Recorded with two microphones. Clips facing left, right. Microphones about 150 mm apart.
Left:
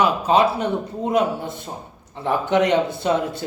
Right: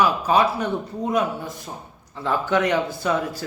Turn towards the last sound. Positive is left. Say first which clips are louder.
# left 2 dB
turn(degrees=25)  # may be behind; listen again after turning